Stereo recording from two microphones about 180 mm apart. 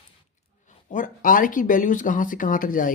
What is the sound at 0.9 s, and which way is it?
Speech, 45° left (ahead or behind).